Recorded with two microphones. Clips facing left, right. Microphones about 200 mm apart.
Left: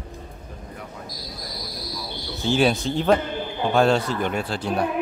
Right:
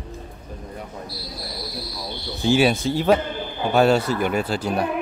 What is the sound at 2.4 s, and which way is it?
Speech, 5° right (ahead or behind).